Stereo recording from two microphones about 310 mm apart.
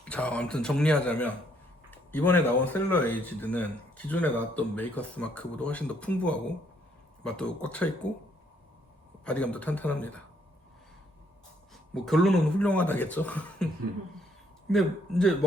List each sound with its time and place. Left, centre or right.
0.0 s speech: centre
9.2 s speech: centre
11.7 s speech: centre
14.7 s speech: centre